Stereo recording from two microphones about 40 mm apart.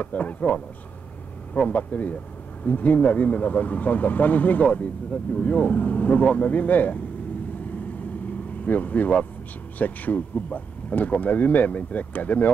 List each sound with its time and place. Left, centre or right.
0.0 s speech: left
8.6 s speech: left